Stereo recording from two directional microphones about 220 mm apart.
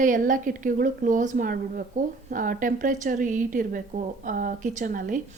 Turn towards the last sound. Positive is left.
turn(degrees=-35)  # may be behind; listen again after turning